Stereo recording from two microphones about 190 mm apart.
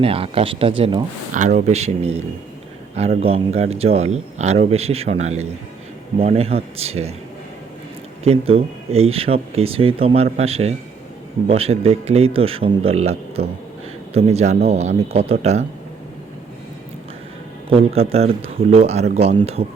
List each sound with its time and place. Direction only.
0.0 s speech: 30° right (ahead or behind)
1.3 s speech: 40° right (ahead or behind)
8.2 s speech: 30° right (ahead or behind)
17.7 s speech: 30° right (ahead or behind)